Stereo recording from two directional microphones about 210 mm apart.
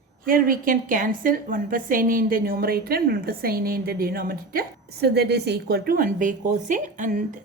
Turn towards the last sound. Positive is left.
turn(degrees=-35)  # may be behind; listen again after turning